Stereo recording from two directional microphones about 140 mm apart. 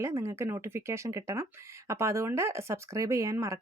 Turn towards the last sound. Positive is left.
turn(degrees=-20)  # may be behind; listen again after turning